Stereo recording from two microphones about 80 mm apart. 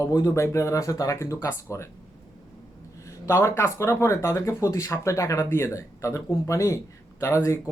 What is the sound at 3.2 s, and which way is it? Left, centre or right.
Speech, left.